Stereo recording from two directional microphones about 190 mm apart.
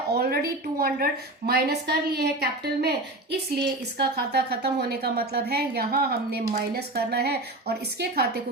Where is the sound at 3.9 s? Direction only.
55° right (ahead or behind).